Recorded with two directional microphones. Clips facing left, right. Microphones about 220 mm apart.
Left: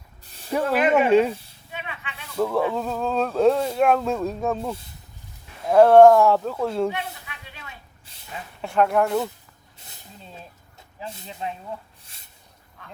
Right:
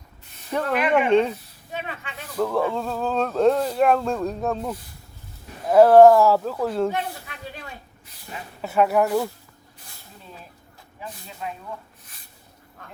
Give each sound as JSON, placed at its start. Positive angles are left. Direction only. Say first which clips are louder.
{"t": 0.5, "sound": "speech", "louder": "left 2 dB", "side_deg": 5}
{"t": 1.7, "sound": "a sound", "louder": "right 4 dB", "side_deg": -40}
{"t": 2.4, "sound": "speech", "louder": "even", "side_deg": 0}
{"t": 6.9, "sound": "a sound", "louder": "right 4 dB", "side_deg": -45}
{"t": 8.6, "sound": "speech", "louder": "right 1 dB", "side_deg": -5}
{"t": 9.7, "sound": "snake", "louder": "left 2 dB", "side_deg": 25}
{"t": 11.0, "sound": "speech", "louder": "left 2 dB", "side_deg": 25}